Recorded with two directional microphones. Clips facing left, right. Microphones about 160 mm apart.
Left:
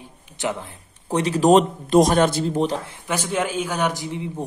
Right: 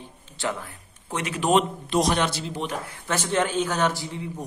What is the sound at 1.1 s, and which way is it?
A man's voice, 35° left (ahead or behind).